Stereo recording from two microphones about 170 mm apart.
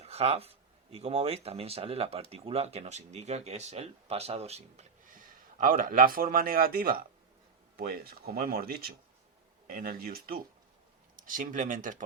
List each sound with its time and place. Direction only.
0.0 s speech: 35° right (ahead or behind)
5.0 s speech: 55° right (ahead or behind)